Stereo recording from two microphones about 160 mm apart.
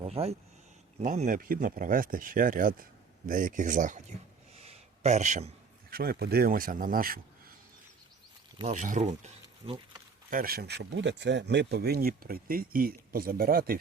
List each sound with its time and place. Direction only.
0.0 s speech: 40° right (ahead or behind)
4.5 s a sound: 40° right (ahead or behind)
5.9 s speech: 70° right (ahead or behind)
8.6 s speech: 50° right (ahead or behind)
10.2 s speech: 65° right (ahead or behind)